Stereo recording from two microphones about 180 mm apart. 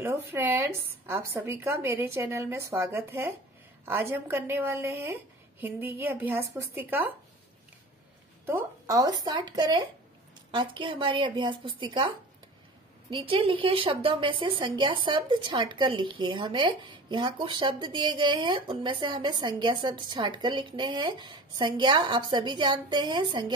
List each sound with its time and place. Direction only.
0.0 s speech: 15° right (ahead or behind)
8.5 s a woman's voice: 15° right (ahead or behind)
13.1 s a woman's voice: 30° right (ahead or behind)